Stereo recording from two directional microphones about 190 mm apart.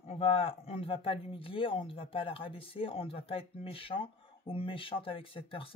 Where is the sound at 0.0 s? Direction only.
30° left (ahead or behind).